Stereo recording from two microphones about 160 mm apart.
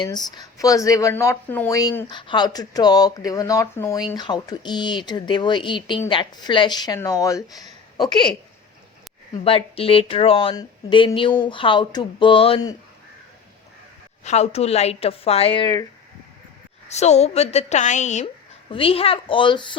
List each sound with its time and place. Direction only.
0.0 s speech: 25° left (ahead or behind)
9.3 s speech: 35° left (ahead or behind)
14.3 s speech: 40° left (ahead or behind)
16.9 s a woman's voice: 45° left (ahead or behind)
18.7 s speech: 35° left (ahead or behind)